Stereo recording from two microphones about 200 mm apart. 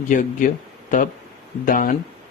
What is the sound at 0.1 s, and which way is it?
Speech, 40° left (ahead or behind).